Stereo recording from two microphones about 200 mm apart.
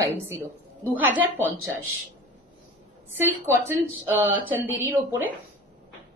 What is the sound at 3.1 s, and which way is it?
Speech, 10° right (ahead or behind).